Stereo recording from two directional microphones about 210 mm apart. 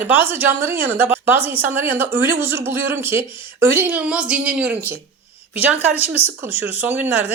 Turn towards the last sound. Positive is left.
turn(degrees=-10)  # may be behind; listen again after turning